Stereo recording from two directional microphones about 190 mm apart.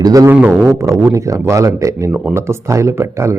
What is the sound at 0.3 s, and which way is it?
A man's voice, 5° right (ahead or behind).